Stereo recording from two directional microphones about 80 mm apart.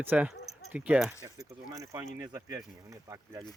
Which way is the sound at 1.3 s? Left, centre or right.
Right.